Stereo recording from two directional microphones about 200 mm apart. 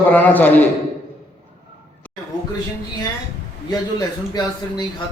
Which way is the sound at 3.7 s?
20° left (ahead or behind).